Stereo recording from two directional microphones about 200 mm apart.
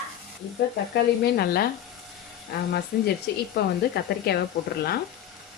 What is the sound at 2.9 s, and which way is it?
Speech, 45° left (ahead or behind).